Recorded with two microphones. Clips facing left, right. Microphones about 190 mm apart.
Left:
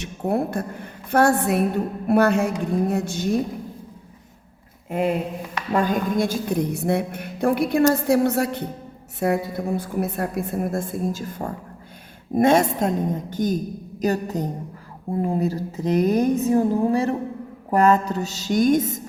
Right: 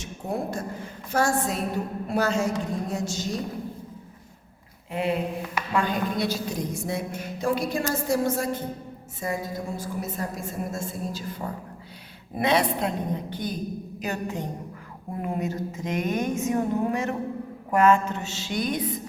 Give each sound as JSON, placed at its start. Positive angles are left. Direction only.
{"t": 0.0, "sound": "a woman's voice", "side_deg": 60}
{"t": 4.9, "sound": "a woman's voice", "side_deg": 45}
{"t": 14.0, "sound": "a sound", "side_deg": 40}